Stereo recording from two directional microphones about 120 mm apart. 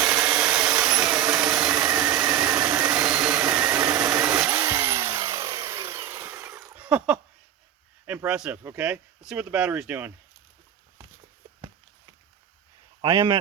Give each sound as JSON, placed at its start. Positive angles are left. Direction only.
{"t": 0.0, "sound": "vacuum cleaner", "side_deg": -15}
{"t": 0.8, "sound": "tools", "side_deg": -10}
{"t": 1.4, "sound": "engine", "side_deg": -10}
{"t": 4.4, "sound": "chainsaw", "side_deg": -25}
{"t": 6.7, "sound": "a sound", "side_deg": -10}
{"t": 8.3, "sound": "speech", "side_deg": -10}
{"t": 13.0, "sound": "speech", "side_deg": -30}